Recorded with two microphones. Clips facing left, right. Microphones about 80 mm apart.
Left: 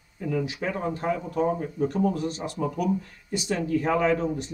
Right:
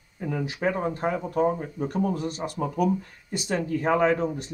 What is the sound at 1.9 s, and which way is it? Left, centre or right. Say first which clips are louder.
Speech: right 1 dB; right.